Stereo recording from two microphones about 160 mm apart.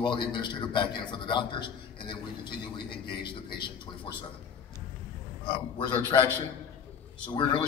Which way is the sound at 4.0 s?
35° left (ahead or behind).